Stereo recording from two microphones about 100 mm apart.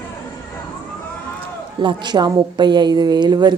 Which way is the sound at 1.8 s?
50° right (ahead or behind).